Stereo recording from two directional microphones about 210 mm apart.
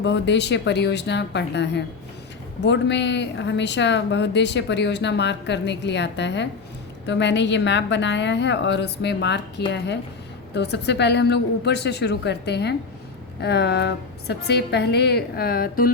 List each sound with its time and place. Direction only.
0.0 s a woman's voice: 55° left (ahead or behind)